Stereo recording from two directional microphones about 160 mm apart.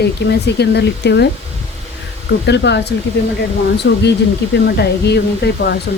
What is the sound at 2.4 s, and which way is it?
Speech, 90° left.